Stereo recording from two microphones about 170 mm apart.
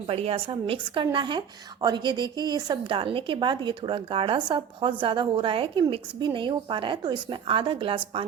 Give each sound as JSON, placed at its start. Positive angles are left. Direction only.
{"t": 0.1, "sound": "a woman's voice", "side_deg": -35}